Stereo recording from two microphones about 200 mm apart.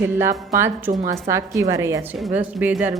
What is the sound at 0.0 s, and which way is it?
Speech, 15° right (ahead or behind).